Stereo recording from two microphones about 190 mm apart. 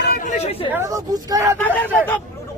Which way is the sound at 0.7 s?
15° right (ahead or behind).